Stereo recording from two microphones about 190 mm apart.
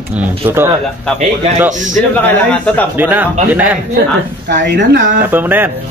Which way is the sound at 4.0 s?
65° right (ahead or behind).